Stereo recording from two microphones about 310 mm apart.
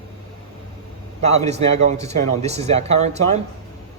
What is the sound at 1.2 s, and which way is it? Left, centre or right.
Speech, right.